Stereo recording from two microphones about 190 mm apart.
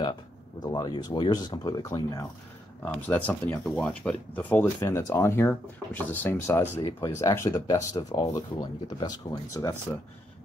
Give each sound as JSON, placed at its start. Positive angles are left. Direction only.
{"t": 0.7, "sound": "speech", "side_deg": 20}
{"t": 2.8, "sound": "speech", "side_deg": 10}